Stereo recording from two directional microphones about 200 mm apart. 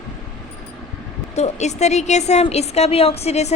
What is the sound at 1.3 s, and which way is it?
A woman's voice, 35° left (ahead or behind).